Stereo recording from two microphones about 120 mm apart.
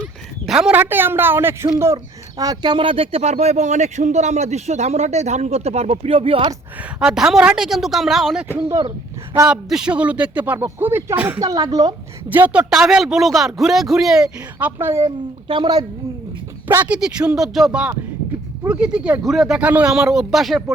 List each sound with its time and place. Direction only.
0.0 s a sound: 5° right (ahead or behind)
0.8 s speech: 15° right (ahead or behind)
2.4 s speech: 35° right (ahead or behind); by 6.5 s 50° right (ahead or behind)
7.0 s speech: 5° right (ahead or behind)
9.5 s speech: 5° right (ahead or behind)
11.3 s a woman's voice: 30° right (ahead or behind)
12.3 s speech: 15° right (ahead or behind)
12.7 s speech: 5° right (ahead or behind)
14.8 s speech: 20° right (ahead or behind)
15.4 s a woman's voice: 40° right (ahead or behind)
16.6 s speech: 15° right (ahead or behind)